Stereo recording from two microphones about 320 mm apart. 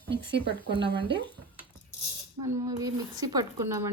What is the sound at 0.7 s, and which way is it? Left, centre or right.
Speech, centre.